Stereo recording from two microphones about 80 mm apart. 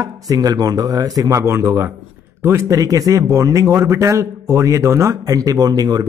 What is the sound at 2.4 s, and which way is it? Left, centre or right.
Speech, right.